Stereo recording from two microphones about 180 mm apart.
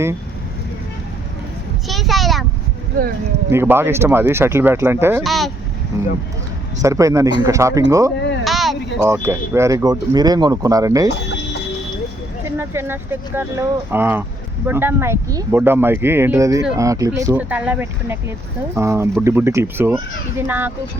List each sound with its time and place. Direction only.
1.9 s a child's voice: centre (ahead or behind)
3.5 s speech: 15° right (ahead or behind)
5.2 s a child's voice: centre (ahead or behind)
5.9 s speech: 15° right (ahead or behind)
8.4 s a sound: centre (ahead or behind)
9.0 s speech: 15° right (ahead or behind)
11.1 s chicken: 75° left (ahead or behind)
12.5 s speech: 15° right (ahead or behind)